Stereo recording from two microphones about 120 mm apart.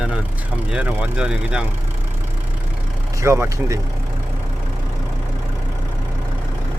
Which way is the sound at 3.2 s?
25° right (ahead or behind).